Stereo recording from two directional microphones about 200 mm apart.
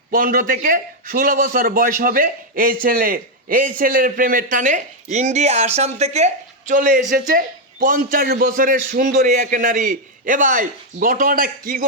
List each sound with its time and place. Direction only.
0.1 s a man's voice: 45° right (ahead or behind)